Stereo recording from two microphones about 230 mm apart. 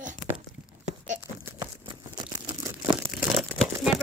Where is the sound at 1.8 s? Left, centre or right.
Centre.